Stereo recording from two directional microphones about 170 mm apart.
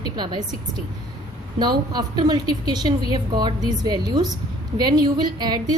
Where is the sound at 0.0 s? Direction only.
25° right (ahead or behind).